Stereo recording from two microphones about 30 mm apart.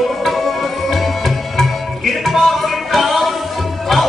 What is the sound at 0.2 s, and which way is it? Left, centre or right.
Tabla, centre.